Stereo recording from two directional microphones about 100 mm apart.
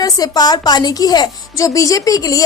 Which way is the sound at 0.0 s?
40° left (ahead or behind).